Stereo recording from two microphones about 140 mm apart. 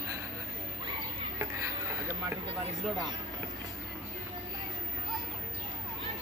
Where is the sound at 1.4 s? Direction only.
20° right (ahead or behind).